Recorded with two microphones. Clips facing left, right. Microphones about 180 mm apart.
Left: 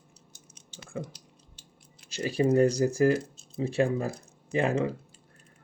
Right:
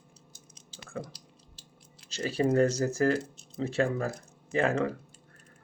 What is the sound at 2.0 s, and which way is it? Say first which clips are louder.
Speech: left 2 dB; 10° left (ahead or behind).